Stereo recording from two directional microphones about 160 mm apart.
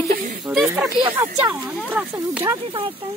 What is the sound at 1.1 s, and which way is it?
Speech, 10° right (ahead or behind).